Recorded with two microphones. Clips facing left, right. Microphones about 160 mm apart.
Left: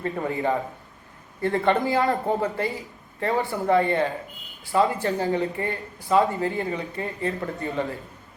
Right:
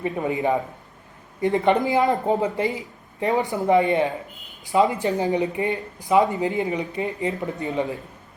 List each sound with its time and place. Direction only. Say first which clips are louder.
0.0 s a man's voice: right 2 dB; 15° right (ahead or behind)